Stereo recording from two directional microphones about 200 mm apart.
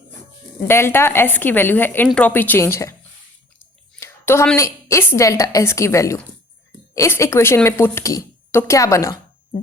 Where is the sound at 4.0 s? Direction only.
10° left (ahead or behind).